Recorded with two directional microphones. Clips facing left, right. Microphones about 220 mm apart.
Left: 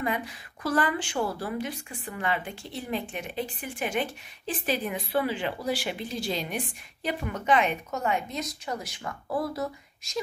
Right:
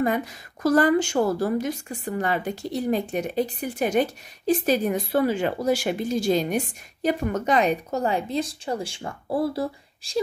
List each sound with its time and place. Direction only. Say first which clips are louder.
0.0 s a woman's voice: right 7 dB; 45° right (ahead or behind)